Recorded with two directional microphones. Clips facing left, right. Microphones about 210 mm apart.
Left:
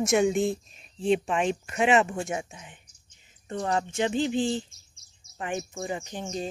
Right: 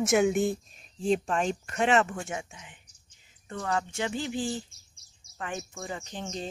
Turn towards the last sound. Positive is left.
turn(degrees=15)  # may be behind; listen again after turning